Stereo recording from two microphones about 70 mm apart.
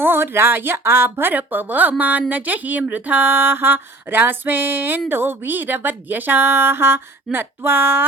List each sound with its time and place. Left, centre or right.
0.0 s a woman's voice: right